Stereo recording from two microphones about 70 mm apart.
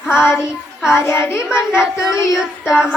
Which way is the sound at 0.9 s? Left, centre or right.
Left.